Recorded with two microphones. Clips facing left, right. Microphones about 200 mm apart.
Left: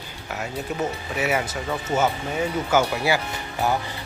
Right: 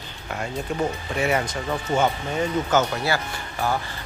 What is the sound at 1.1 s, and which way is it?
A man's voice, 5° left (ahead or behind).